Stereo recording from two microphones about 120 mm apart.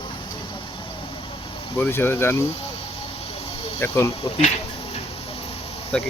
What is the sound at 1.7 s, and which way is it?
Speech, 20° left (ahead or behind).